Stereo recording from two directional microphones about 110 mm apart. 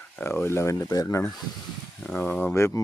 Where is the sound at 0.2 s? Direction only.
20° left (ahead or behind).